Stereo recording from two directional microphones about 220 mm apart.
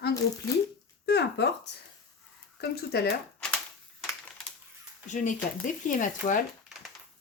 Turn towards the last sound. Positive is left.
turn(degrees=35)  # may be behind; listen again after turning